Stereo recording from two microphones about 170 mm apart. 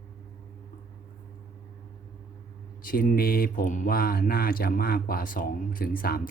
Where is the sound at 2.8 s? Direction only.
55° left (ahead or behind).